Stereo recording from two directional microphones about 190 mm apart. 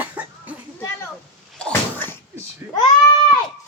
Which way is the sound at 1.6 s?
10° left (ahead or behind).